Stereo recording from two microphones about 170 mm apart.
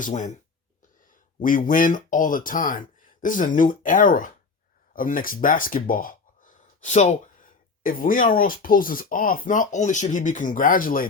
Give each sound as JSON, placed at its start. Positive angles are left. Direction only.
{"t": 0.0, "sound": "speech", "side_deg": 45}
{"t": 1.4, "sound": "speech", "side_deg": 50}
{"t": 7.8, "sound": "speech", "side_deg": 55}